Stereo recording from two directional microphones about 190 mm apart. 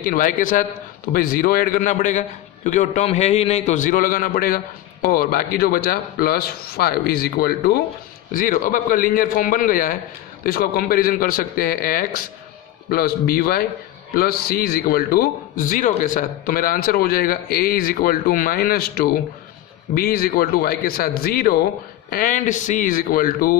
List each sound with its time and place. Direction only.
0.0 s a man's voice: 45° left (ahead or behind)